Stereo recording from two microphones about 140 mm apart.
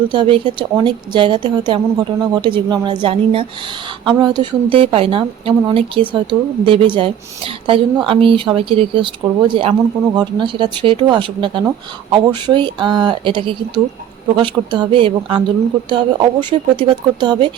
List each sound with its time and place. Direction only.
0.1 s a woman's voice: 35° right (ahead or behind)